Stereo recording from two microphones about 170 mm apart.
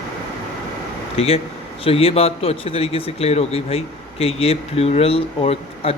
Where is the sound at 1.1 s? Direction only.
35° left (ahead or behind).